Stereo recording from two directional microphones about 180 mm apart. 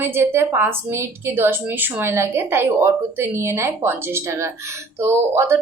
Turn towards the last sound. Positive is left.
turn(degrees=-15)  # may be behind; listen again after turning